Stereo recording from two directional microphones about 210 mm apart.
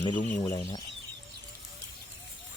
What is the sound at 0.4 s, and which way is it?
Speech, 15° left (ahead or behind).